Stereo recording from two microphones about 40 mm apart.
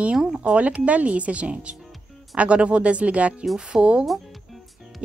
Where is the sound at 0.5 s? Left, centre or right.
Right.